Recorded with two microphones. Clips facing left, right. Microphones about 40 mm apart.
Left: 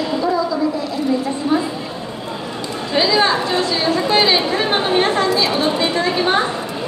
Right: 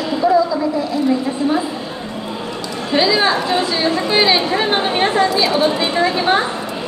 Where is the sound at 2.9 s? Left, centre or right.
Centre.